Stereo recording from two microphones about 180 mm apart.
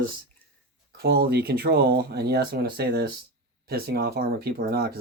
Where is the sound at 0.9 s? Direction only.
60° right (ahead or behind).